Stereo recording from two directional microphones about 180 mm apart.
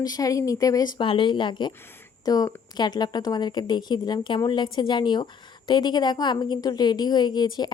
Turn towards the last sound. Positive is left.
turn(degrees=25)  # may be behind; listen again after turning